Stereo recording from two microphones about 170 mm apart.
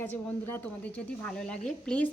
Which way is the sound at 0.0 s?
10° left (ahead or behind).